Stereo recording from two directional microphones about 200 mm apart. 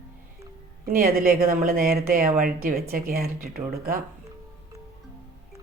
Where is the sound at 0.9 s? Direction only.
50° right (ahead or behind).